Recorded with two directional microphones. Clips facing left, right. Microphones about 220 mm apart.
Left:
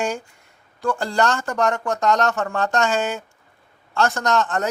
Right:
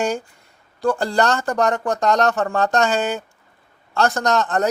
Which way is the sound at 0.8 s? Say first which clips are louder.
Right 3 dB; 35° right (ahead or behind).